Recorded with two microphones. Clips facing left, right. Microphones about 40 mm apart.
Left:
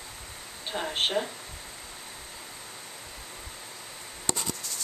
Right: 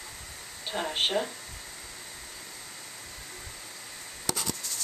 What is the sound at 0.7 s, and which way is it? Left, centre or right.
Speech, centre.